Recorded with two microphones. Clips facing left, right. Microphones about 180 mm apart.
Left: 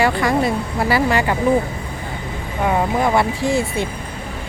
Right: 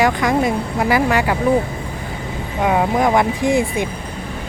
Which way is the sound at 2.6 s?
10° right (ahead or behind).